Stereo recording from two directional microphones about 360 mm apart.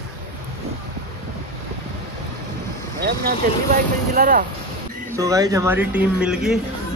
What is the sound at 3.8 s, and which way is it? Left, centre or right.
Speech, right.